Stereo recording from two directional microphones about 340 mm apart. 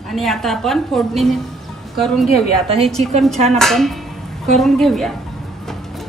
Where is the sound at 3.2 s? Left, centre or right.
Centre.